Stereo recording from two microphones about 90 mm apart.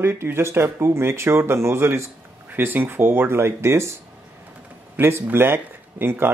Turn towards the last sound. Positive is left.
turn(degrees=-25)  # may be behind; listen again after turning